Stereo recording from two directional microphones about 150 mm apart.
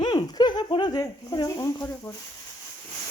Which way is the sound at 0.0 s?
25° left (ahead or behind).